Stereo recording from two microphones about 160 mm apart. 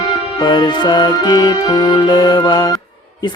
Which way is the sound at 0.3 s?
30° left (ahead or behind).